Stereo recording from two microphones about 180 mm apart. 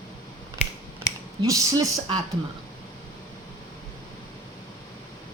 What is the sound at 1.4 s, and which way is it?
Speech, 20° right (ahead or behind).